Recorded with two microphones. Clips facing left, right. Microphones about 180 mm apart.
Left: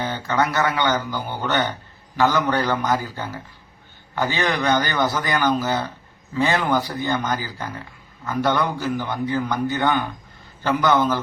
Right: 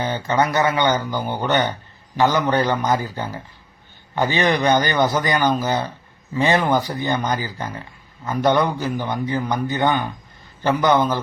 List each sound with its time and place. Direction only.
0.0 s a man's voice: 20° right (ahead or behind)